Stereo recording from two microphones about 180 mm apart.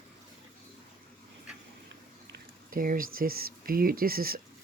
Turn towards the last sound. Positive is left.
turn(degrees=-55)  # may be behind; listen again after turning